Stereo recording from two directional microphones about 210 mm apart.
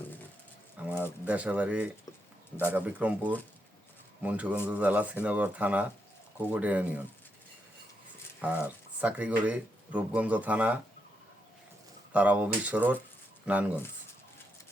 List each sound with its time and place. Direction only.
0.8 s pigeon: 5° right (ahead or behind)
1.2 s speech: 5° right (ahead or behind)
8.4 s speech: 5° right (ahead or behind)
12.1 s speech: 5° right (ahead or behind)